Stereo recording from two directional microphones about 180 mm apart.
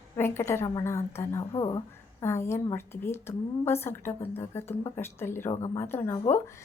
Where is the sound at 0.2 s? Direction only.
15° left (ahead or behind).